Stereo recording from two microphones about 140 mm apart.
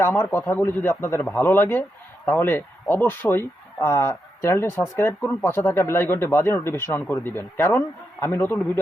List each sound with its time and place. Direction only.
0.0 s speech: 15° left (ahead or behind)